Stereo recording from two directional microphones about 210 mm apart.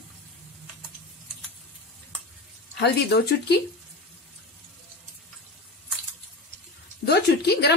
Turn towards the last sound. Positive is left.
turn(degrees=50)  # may be behind; listen again after turning